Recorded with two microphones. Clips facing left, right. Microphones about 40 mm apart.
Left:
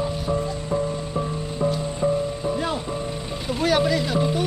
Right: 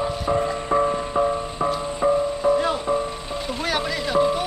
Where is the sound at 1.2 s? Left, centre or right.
Right.